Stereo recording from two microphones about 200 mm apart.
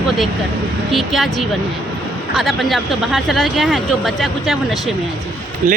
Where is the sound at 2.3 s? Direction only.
Centre (ahead or behind).